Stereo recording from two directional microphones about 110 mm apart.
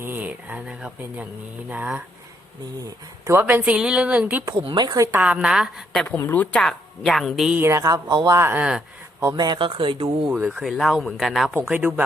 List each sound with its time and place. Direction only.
0.0 s speech: 15° right (ahead or behind)
3.2 s speech: 20° right (ahead or behind)
3.6 s speech: 5° right (ahead or behind)
4.8 s speech: 40° right (ahead or behind)
5.1 s speech: 10° right (ahead or behind)
6.1 s a woman's voice: 20° left (ahead or behind)
6.6 s speech: centre (ahead or behind)
7.6 s speech: 25° right (ahead or behind)
8.0 s speech: 40° right (ahead or behind)
8.4 s speech: 20° right (ahead or behind)
9.3 s speech: 40° right (ahead or behind)
10.3 s speech: 5° right (ahead or behind)
11.7 s speech: 15° right (ahead or behind)